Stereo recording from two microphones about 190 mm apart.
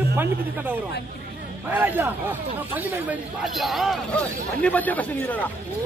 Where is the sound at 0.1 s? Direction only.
10° right (ahead or behind).